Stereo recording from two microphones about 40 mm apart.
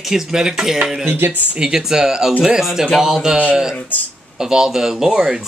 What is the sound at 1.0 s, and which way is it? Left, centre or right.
Speech, right.